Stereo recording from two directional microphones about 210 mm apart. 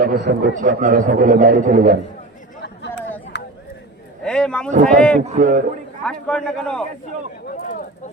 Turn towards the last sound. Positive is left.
turn(degrees=5)  # may be behind; listen again after turning